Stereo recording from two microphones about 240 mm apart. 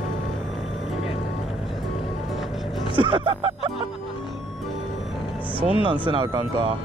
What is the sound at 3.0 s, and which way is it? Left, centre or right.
Speech, right.